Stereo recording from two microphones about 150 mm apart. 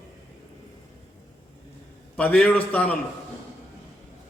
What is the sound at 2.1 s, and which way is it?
Speech, 10° left (ahead or behind).